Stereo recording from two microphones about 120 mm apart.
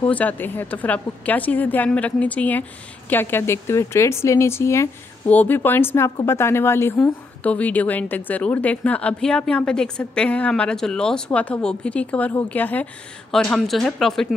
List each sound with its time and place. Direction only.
0.0 s a woman's voice: 15° left (ahead or behind)